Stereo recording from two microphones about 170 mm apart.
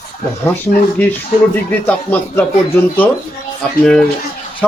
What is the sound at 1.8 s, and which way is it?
Speech, 10° left (ahead or behind).